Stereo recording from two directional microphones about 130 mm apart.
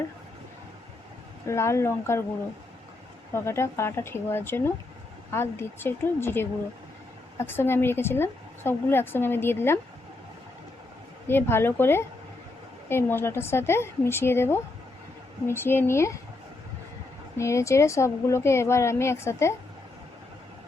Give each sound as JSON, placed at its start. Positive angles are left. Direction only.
{"t": 1.5, "sound": "speech", "side_deg": 20}
{"t": 3.3, "sound": "a woman's voice", "side_deg": 20}
{"t": 11.3, "sound": "a woman's voice", "side_deg": 15}
{"t": 17.3, "sound": "speech", "side_deg": 20}